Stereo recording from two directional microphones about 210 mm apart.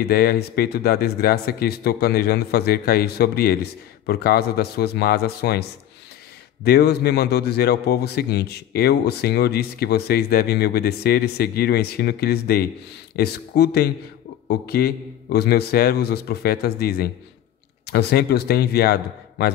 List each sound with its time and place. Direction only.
0.1 s a man's voice: 45° left (ahead or behind)